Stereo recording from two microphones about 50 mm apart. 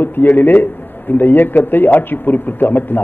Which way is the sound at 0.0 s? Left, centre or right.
Left.